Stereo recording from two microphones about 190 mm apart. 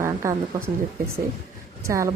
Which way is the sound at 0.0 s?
15° right (ahead or behind).